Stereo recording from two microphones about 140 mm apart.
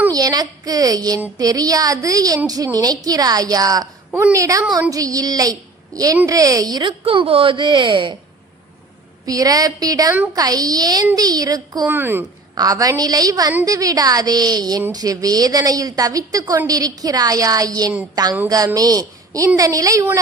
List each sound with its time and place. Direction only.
0.1 s a woman's voice: 25° right (ahead or behind)
7.0 s speech: 40° right (ahead or behind)
9.2 s a woman's voice: 25° right (ahead or behind)
11.9 s speech: 15° right (ahead or behind)
12.5 s a woman's voice: 25° right (ahead or behind)